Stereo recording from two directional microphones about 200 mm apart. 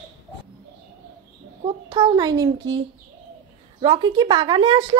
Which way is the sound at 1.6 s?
25° right (ahead or behind).